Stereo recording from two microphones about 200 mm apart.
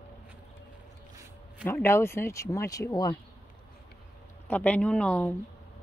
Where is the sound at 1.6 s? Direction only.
10° left (ahead or behind).